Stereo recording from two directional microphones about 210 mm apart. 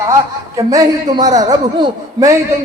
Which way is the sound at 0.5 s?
15° right (ahead or behind).